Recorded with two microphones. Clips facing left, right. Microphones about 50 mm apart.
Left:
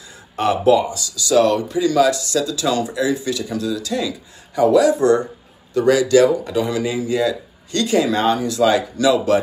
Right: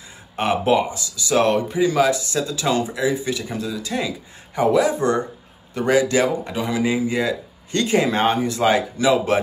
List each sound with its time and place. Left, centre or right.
0.4 s speech: right